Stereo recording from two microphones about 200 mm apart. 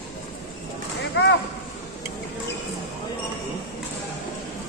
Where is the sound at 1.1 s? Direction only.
60° left (ahead or behind).